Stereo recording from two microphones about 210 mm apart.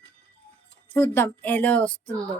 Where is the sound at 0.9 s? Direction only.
10° left (ahead or behind).